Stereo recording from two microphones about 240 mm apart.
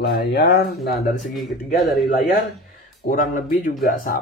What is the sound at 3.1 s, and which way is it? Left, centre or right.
Speech, left.